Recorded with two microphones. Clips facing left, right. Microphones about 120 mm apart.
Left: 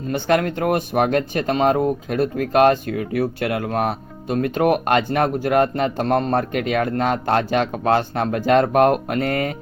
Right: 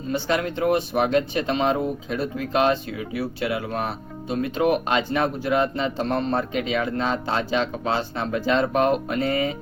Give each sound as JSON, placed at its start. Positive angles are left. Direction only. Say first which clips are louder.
{"t": 0.1, "sound": "a man's voice", "louder": "left 5 dB", "side_deg": 55}